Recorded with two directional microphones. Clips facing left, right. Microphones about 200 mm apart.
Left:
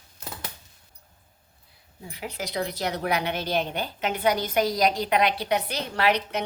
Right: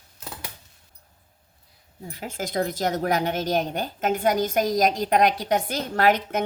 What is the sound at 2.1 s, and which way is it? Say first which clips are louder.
A woman's voice: right 3 dB; 45° right (ahead or behind).